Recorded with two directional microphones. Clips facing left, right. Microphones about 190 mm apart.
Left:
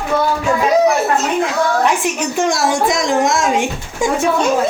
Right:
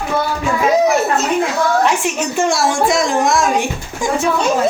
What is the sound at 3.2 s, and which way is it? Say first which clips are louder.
Speech: even; 20° left (ahead or behind).